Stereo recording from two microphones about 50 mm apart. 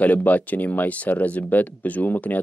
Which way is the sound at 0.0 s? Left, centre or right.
Left.